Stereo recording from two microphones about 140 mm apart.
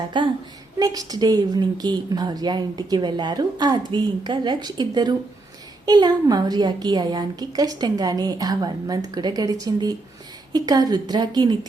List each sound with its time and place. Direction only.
0.1 s a woman's voice: 35° right (ahead or behind)